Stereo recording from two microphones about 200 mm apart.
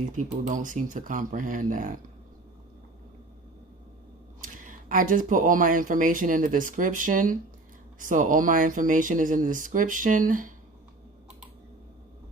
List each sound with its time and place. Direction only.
0.4 s speech: 40° right (ahead or behind)
4.4 s speech: 40° right (ahead or behind)